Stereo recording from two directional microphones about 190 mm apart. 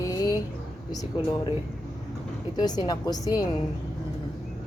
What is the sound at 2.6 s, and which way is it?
Speech, 20° left (ahead or behind).